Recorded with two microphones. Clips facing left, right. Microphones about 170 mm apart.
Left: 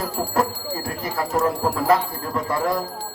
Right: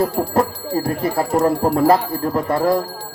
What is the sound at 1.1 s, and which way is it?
Speech, 35° right (ahead or behind).